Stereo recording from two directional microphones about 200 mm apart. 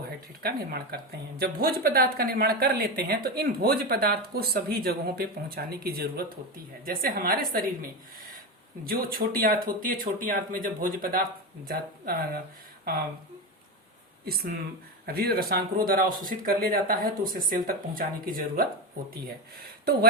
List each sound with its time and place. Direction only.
0.4 s speech: 50° right (ahead or behind)
14.3 s speech: 50° right (ahead or behind)
19.6 s speech: 50° right (ahead or behind)